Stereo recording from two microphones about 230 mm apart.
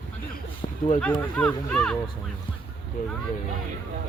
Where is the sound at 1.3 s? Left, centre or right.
Centre.